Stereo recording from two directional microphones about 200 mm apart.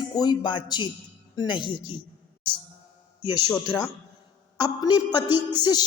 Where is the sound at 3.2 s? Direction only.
20° left (ahead or behind).